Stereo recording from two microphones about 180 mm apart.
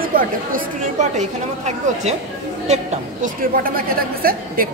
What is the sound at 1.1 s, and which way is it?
A woman's voice, 40° right (ahead or behind).